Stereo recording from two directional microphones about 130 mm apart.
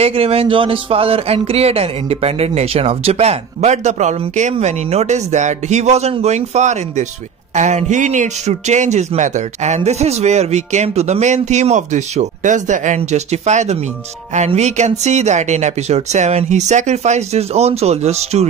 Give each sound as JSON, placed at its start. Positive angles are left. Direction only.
{"t": 0.0, "sound": "a man's voice", "side_deg": -50}